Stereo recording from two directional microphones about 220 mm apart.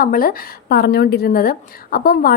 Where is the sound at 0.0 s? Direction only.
40° left (ahead or behind).